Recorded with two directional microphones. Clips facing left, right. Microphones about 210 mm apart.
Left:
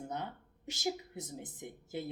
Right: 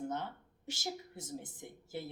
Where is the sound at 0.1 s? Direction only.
15° left (ahead or behind).